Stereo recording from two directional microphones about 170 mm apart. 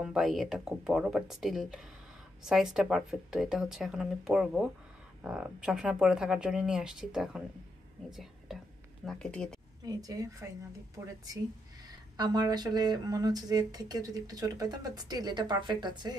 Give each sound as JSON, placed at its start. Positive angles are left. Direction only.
{"t": 0.0, "sound": "speech", "side_deg": 0}
{"t": 9.8, "sound": "speech", "side_deg": -20}
{"t": 12.2, "sound": "speech", "side_deg": -25}